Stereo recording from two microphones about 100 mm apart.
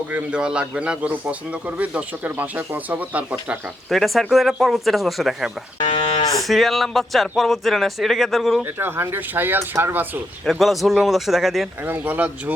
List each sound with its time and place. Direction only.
0.1 s speech: 10° right (ahead or behind)
3.8 s speech: centre (ahead or behind)
5.9 s moo: 55° left (ahead or behind)
6.5 s speech: centre (ahead or behind)
8.8 s speech: 20° right (ahead or behind)
10.4 s speech: centre (ahead or behind)
11.9 s speech: 15° right (ahead or behind)